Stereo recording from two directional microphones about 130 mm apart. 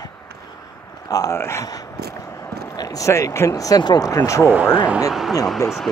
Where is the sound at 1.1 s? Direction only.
25° left (ahead or behind).